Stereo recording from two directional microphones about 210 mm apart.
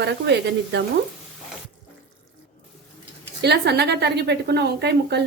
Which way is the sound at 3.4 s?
50° right (ahead or behind).